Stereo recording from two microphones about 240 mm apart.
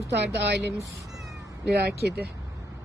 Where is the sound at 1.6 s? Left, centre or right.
Right.